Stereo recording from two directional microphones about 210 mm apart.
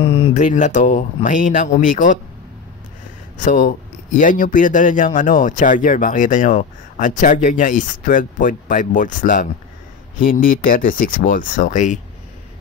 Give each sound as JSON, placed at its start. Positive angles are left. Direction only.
{"t": 0.0, "sound": "speech", "side_deg": 25}
{"t": 3.3, "sound": "speech", "side_deg": 40}